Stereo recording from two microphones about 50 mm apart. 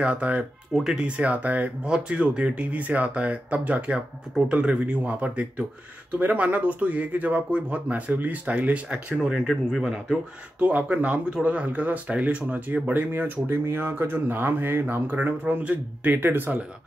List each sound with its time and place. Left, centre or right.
0.0 s speech: right
1.9 s speech: right
9.1 s speech: centre
10.6 s speech: right
15.1 s speech: right